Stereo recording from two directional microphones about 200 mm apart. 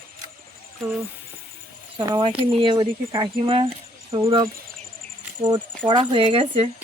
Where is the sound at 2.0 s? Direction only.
20° right (ahead or behind).